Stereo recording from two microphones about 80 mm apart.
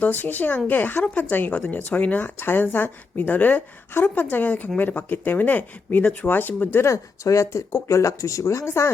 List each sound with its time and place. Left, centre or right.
0.0 s a woman's voice: left
6.8 s speech: left